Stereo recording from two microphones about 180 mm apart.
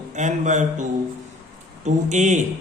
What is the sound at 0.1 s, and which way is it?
A man's voice, 40° right (ahead or behind).